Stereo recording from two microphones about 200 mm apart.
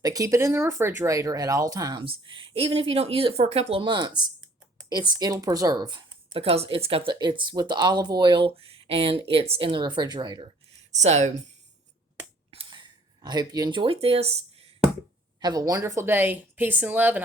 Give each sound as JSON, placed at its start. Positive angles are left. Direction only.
{"t": 0.0, "sound": "speech", "side_deg": -15}
{"t": 10.9, "sound": "speech", "side_deg": -35}
{"t": 12.5, "sound": "a sound", "side_deg": -25}
{"t": 15.4, "sound": "a woman's voice", "side_deg": -20}